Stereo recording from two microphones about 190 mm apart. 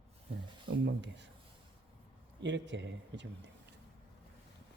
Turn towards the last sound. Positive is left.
turn(degrees=-70)  # may be behind; listen again after turning